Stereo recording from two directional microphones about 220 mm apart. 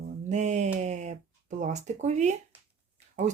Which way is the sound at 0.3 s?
30° right (ahead or behind).